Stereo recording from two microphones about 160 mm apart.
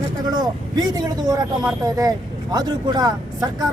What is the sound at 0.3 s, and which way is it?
Speech, 25° right (ahead or behind).